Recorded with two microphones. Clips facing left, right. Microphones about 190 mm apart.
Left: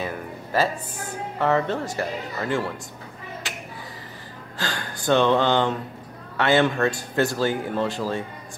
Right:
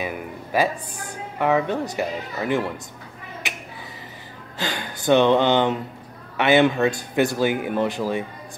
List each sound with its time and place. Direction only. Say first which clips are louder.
0.0 s speech: right 1 dB; 15° right (ahead or behind)
3.4 s finger snapping: right 3 dB; 20° right (ahead or behind)
4.6 s speech: right 2 dB; 20° right (ahead or behind)